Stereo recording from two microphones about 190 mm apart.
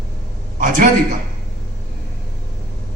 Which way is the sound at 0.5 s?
45° right (ahead or behind).